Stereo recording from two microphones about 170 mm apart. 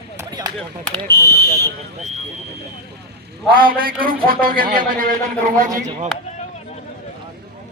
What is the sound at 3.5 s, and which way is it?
A man's voice, 60° right (ahead or behind).